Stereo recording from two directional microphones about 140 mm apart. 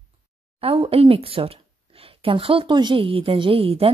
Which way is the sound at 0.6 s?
45° right (ahead or behind).